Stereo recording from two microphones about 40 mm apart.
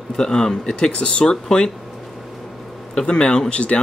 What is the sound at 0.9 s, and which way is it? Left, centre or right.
Speech, left.